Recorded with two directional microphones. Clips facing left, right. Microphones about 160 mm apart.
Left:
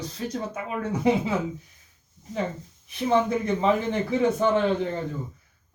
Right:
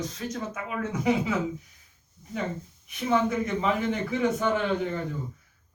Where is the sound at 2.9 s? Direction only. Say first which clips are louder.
Left 2 dB; 30° left (ahead or behind).